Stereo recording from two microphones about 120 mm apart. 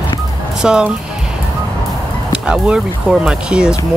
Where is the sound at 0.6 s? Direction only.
5° right (ahead or behind).